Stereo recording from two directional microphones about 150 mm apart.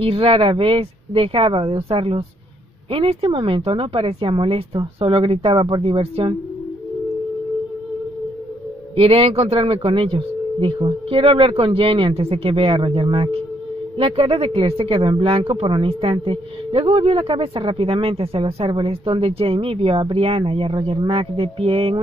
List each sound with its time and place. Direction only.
0.0 s speech: 40° right (ahead or behind)
8.9 s speech: 40° right (ahead or behind)